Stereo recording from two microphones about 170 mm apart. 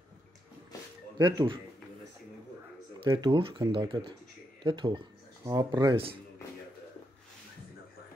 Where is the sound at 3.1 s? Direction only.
25° right (ahead or behind).